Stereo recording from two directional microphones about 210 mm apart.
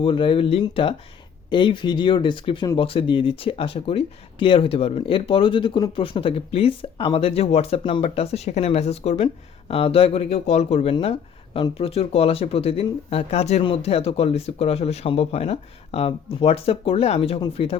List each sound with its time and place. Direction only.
0.0 s speech: 25° left (ahead or behind)